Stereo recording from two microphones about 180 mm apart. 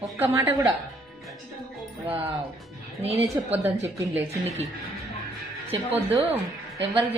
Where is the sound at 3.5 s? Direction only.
15° right (ahead or behind).